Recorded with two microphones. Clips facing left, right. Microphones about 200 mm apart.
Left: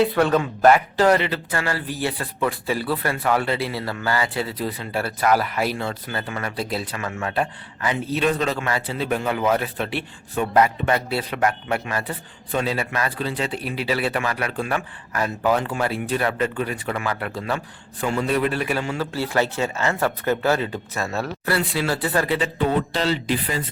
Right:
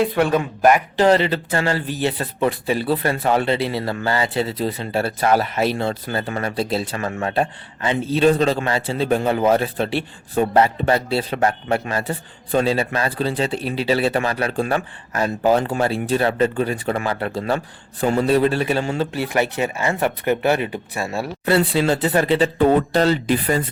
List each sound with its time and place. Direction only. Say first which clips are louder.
0.0 s speech: even; 15° right (ahead or behind)
19.1 s speech: right 2 dB; 15° right (ahead or behind)
21.5 s speech: right 6 dB; 30° right (ahead or behind)
22.5 s speech: right 6 dB; 45° right (ahead or behind)